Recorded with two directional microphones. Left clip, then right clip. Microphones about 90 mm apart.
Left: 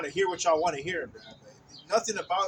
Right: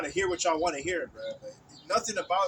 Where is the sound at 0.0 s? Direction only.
40° left (ahead or behind).